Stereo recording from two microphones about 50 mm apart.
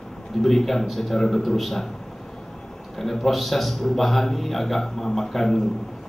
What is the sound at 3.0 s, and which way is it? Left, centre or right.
A man's voice, centre.